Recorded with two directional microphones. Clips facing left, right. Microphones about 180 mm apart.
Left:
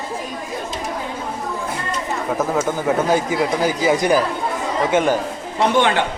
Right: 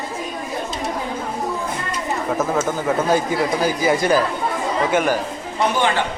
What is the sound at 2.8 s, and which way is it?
Speech, 15° left (ahead or behind).